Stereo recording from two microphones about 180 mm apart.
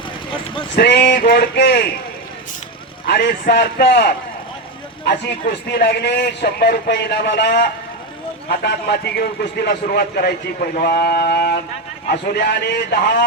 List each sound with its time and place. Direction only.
0.8 s a man's voice: 65° left (ahead or behind)
3.1 s a man's voice: 65° left (ahead or behind)